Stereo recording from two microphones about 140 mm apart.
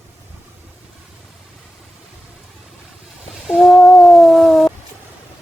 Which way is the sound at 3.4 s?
Centre (ahead or behind).